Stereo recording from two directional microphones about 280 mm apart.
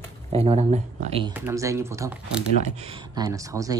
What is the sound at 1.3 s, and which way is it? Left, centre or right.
Speech, centre.